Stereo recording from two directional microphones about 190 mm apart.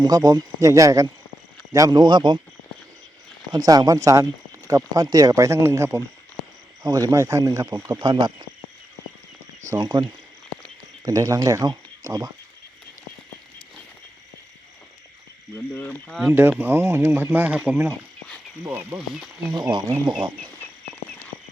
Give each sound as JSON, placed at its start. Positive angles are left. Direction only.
{"t": 0.0, "sound": "speech", "side_deg": -20}
{"t": 3.5, "sound": "speech", "side_deg": -20}
{"t": 9.6, "sound": "speech", "side_deg": -20}
{"t": 15.5, "sound": "speech", "side_deg": 10}
{"t": 16.3, "sound": "speech", "side_deg": -10}
{"t": 20.4, "sound": "frog", "side_deg": 10}